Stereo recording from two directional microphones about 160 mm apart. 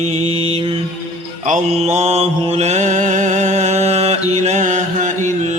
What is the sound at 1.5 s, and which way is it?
Mantra, 45° right (ahead or behind).